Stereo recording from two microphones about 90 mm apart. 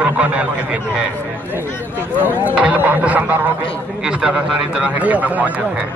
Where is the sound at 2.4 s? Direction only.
20° right (ahead or behind).